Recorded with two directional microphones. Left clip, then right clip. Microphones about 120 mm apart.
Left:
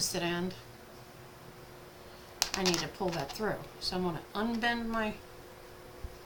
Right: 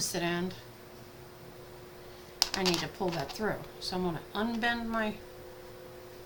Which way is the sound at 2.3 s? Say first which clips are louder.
Right 1 dB; 5° right (ahead or behind).